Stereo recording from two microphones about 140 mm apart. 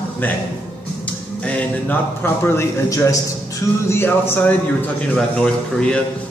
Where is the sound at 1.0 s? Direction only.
10° left (ahead or behind).